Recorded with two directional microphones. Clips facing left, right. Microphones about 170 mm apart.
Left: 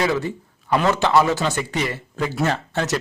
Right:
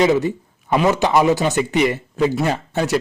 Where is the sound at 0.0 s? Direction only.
20° right (ahead or behind).